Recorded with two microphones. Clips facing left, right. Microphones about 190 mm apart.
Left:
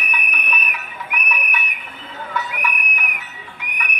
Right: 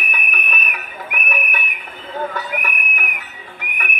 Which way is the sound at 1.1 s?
50° right (ahead or behind).